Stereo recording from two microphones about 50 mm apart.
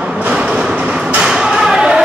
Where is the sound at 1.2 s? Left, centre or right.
Centre.